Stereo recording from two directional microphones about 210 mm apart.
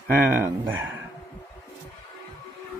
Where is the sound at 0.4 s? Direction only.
10° right (ahead or behind).